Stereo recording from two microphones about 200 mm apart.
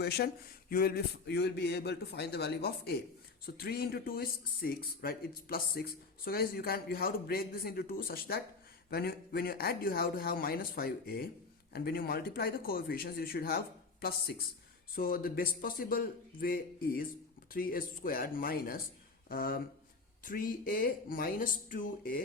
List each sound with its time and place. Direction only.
0.0 s speech: 55° left (ahead or behind)
14.9 s speech: 45° left (ahead or behind)